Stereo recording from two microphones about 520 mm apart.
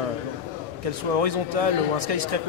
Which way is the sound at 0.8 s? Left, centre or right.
Right.